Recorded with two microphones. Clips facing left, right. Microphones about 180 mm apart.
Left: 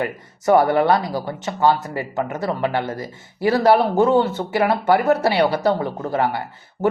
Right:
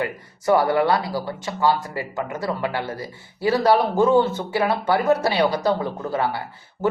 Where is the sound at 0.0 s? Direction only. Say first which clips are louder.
Left 2 dB; 20° left (ahead or behind).